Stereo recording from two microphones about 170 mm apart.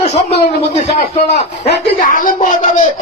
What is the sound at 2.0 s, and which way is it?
Speech, 50° left (ahead or behind).